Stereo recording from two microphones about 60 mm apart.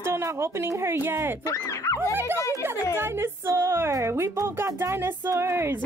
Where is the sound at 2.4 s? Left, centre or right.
Left.